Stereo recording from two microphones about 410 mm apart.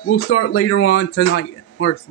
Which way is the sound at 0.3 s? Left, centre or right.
Left.